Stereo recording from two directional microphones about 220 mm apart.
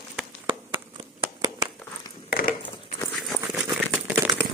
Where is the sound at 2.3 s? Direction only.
40° left (ahead or behind).